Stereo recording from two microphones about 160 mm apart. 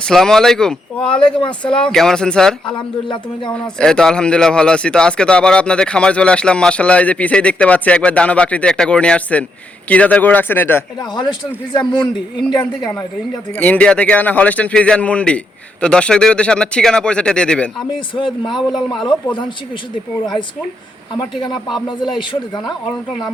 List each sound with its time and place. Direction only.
0.0 s speech: 5° left (ahead or behind)
2.6 s speech: 30° left (ahead or behind)
3.5 s a man's voice: 5° left (ahead or behind)
11.0 s a man's voice: 25° left (ahead or behind)
13.6 s a man's voice: 10° left (ahead or behind)
17.7 s speech: 30° left (ahead or behind)
18.7 s speech: centre (ahead or behind)
19.0 s speech: 30° left (ahead or behind)
21.2 s a man's voice: 25° left (ahead or behind)